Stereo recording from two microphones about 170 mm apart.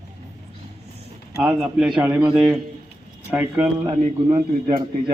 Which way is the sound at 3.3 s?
5° right (ahead or behind).